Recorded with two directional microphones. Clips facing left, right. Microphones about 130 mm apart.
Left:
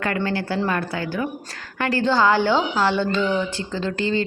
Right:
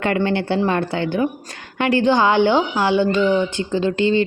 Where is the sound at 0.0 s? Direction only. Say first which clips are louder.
Right 5 dB; 20° right (ahead or behind).